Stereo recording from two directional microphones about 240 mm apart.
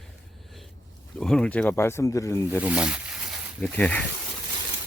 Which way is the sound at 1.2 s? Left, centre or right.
Centre.